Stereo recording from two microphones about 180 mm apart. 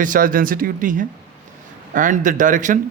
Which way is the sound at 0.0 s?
50° right (ahead or behind).